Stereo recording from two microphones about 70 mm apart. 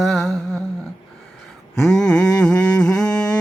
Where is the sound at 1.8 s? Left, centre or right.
Centre.